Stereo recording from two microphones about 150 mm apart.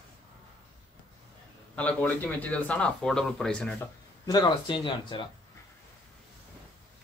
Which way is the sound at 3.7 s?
25° left (ahead or behind).